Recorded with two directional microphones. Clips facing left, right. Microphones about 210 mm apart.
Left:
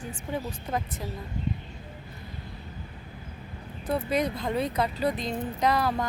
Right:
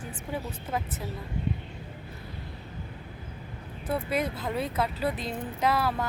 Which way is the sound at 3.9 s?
5° right (ahead or behind).